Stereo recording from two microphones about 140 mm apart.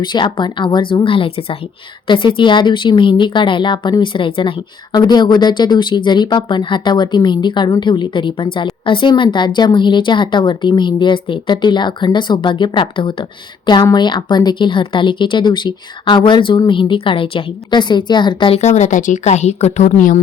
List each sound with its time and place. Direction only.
0.0 s speech: 30° left (ahead or behind)
18.6 s a woman's voice: 55° left (ahead or behind)